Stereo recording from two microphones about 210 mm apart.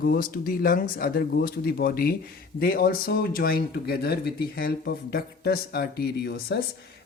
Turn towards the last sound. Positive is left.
turn(degrees=50)  # may be behind; listen again after turning